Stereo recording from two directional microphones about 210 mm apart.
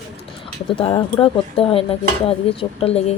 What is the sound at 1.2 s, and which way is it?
Speech, 25° left (ahead or behind).